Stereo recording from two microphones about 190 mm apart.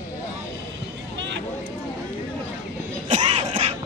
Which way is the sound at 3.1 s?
35° right (ahead or behind).